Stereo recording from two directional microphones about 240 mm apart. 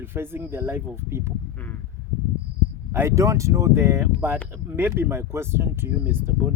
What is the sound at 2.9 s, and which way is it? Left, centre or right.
Speech, centre.